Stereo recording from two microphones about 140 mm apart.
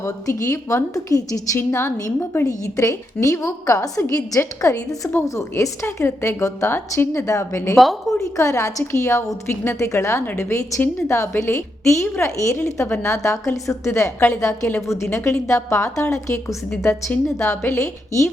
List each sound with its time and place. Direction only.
0.0 s a woman's voice: 20° left (ahead or behind)
8.1 s a woman's voice: centre (ahead or behind)
8.4 s a woman's voice: 20° left (ahead or behind)
16.9 s a woman's voice: 5° left (ahead or behind)
17.3 s a woman's voice: 15° left (ahead or behind)